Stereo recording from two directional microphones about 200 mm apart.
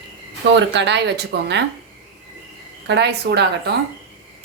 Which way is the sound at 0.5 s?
60° right (ahead or behind).